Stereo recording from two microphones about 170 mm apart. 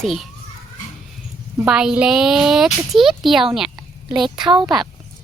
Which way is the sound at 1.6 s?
5° right (ahead or behind).